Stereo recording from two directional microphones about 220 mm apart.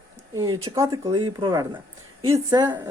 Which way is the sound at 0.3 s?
15° right (ahead or behind).